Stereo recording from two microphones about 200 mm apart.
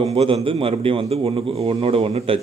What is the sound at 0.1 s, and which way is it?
A man's voice, 30° right (ahead or behind).